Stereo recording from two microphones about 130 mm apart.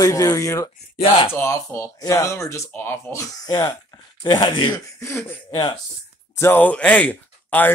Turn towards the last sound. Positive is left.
turn(degrees=15)  # may be behind; listen again after turning